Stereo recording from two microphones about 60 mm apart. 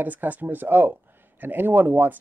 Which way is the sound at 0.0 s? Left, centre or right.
Right.